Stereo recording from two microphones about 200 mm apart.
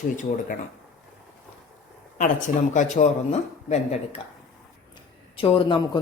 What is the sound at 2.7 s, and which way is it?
Speech, 35° left (ahead or behind).